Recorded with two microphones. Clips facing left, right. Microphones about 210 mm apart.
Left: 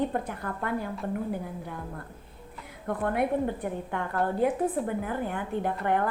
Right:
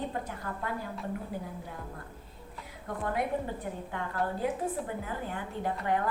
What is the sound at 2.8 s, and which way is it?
A woman's voice, 60° left (ahead or behind).